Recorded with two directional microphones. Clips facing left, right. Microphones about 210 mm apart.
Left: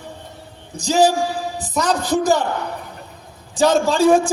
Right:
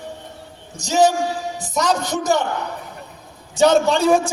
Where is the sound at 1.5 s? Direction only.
35° left (ahead or behind).